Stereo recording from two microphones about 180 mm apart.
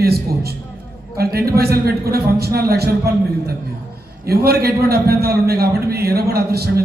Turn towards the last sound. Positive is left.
turn(degrees=-60)  # may be behind; listen again after turning